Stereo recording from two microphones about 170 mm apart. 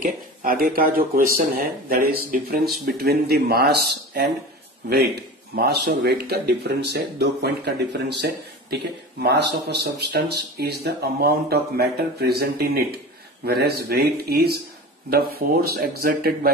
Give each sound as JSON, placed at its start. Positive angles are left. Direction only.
{"t": 0.0, "sound": "speech", "side_deg": -55}